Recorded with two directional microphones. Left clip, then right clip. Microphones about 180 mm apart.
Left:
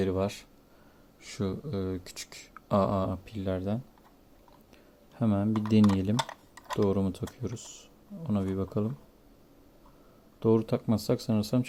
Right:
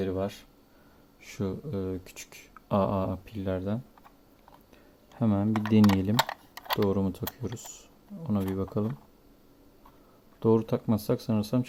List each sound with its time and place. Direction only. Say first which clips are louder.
0.0 s a sound: left 1 dB; 15° left (ahead or behind)
1.2 s speech: even; centre (ahead or behind)
5.1 s speech: right 1 dB; centre (ahead or behind)
6.1 s typing: right 5 dB; 25° right (ahead or behind)
6.8 s speech: even; centre (ahead or behind)
10.4 s speech: right 1 dB; 5° right (ahead or behind)